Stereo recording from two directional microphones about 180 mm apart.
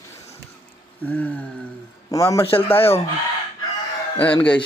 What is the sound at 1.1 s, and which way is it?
Speech, 10° left (ahead or behind).